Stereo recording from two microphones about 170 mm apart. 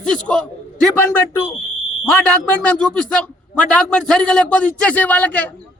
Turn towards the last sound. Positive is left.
turn(degrees=10)  # may be behind; listen again after turning